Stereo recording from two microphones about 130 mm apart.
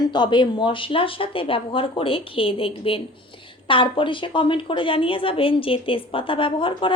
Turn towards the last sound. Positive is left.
turn(degrees=40)  # may be behind; listen again after turning